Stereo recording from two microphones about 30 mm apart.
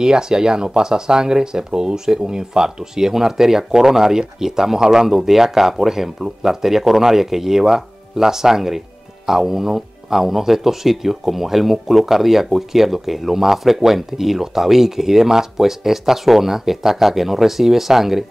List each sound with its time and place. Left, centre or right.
0.0 s speech: right
5.0 s speech: centre